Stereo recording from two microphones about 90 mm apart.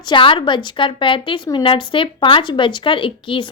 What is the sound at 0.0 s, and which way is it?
A woman's voice, 65° left (ahead or behind).